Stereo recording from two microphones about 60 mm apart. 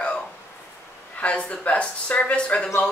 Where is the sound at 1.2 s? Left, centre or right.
Centre.